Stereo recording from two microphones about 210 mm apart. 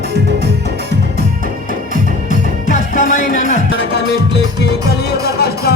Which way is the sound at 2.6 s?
40° left (ahead or behind).